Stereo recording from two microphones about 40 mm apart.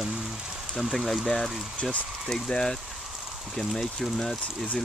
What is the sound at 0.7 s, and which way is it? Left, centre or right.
Speech, centre.